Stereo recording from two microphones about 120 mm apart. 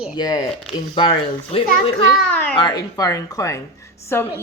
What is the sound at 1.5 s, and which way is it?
Speech, 50° left (ahead or behind).